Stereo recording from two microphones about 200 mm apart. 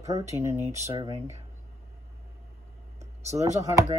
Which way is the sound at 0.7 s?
30° right (ahead or behind).